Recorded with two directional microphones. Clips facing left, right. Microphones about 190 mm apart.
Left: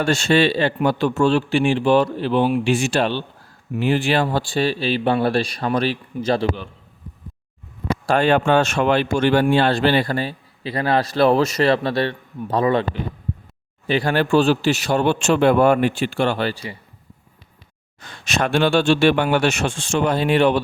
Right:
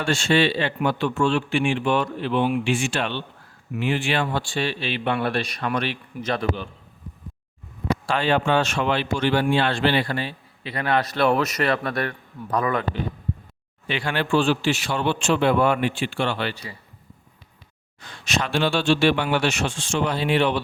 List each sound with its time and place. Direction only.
0.0 s speech: 40° left (ahead or behind)
8.0 s speech: 45° left (ahead or behind); by 12.8 s 25° left (ahead or behind)
13.8 s speech: 40° left (ahead or behind)
18.0 s speech: 50° left (ahead or behind)